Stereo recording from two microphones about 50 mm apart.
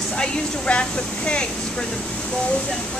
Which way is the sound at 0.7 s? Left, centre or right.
Left.